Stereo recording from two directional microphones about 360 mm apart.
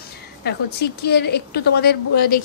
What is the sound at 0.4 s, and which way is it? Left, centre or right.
A woman's voice, left.